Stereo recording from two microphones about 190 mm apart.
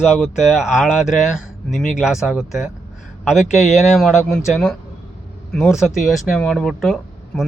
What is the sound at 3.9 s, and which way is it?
Speech, centre (ahead or behind).